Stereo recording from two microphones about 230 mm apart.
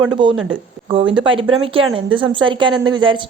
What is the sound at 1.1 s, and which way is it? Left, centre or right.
Speech, right.